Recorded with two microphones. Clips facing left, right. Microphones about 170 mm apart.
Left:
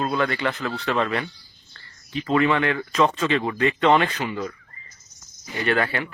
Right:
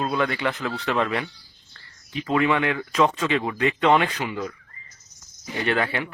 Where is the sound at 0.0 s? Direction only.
15° right (ahead or behind).